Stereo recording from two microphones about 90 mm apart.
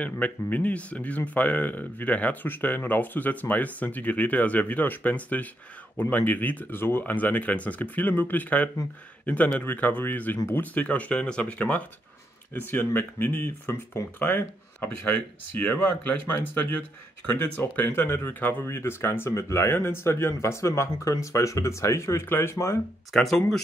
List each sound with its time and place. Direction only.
0.0 s speech: 15° left (ahead or behind)
23.1 s speech: 5° left (ahead or behind)